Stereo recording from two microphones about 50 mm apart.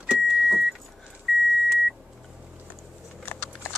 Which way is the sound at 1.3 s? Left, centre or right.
Centre.